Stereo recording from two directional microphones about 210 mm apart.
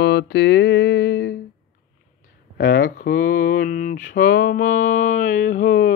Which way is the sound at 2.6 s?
45° left (ahead or behind).